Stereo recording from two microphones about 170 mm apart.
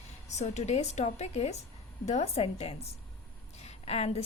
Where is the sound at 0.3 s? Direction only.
40° left (ahead or behind).